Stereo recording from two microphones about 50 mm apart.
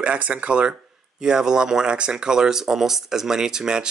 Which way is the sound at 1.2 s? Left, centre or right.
Centre.